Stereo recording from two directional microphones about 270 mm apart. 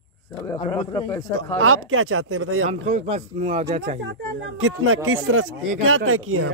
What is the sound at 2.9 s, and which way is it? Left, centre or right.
Speech, right.